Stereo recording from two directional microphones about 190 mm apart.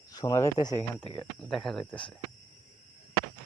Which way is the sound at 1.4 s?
Centre (ahead or behind).